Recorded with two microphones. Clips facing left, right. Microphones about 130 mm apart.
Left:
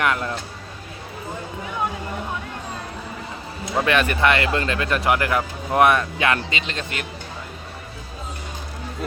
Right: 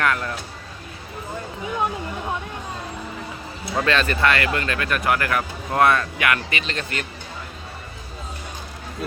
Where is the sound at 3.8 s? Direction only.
15° left (ahead or behind).